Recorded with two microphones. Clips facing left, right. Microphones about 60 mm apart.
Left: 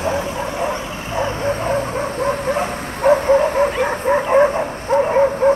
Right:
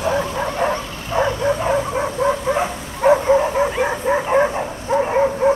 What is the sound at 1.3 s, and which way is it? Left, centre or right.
Bow-wow, left.